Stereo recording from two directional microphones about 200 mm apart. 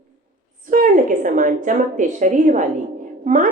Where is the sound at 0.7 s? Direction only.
40° right (ahead or behind).